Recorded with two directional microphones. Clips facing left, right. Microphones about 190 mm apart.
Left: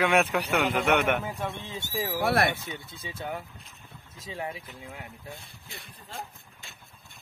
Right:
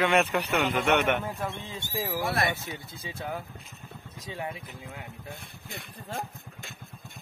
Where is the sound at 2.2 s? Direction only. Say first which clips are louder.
Left 5 dB; 60° left (ahead or behind).